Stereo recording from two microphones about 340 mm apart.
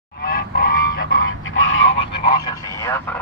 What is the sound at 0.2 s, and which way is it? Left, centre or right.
Goose, left.